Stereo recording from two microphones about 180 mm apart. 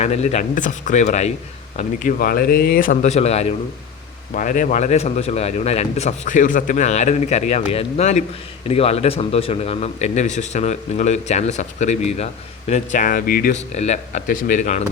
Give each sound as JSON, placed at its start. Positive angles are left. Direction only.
{"t": 0.0, "sound": "a man's voice", "side_deg": 35}
{"t": 4.4, "sound": "a man's voice", "side_deg": 45}
{"t": 13.7, "sound": "speech", "side_deg": 40}